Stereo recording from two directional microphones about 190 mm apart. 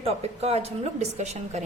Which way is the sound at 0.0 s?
35° right (ahead or behind).